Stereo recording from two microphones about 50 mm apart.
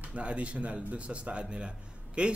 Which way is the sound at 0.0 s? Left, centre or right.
Right.